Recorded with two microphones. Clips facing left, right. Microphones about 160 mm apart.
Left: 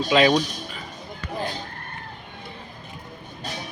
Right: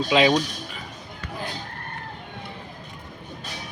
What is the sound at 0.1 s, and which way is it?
Speech, 15° right (ahead or behind).